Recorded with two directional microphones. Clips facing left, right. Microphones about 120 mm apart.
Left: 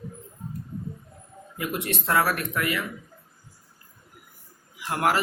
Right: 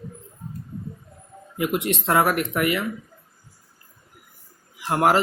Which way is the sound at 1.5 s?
20° right (ahead or behind).